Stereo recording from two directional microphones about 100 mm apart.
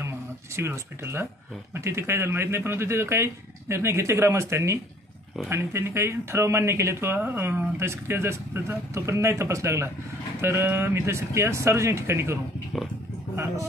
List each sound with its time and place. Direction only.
0.6 s speech: 25° right (ahead or behind)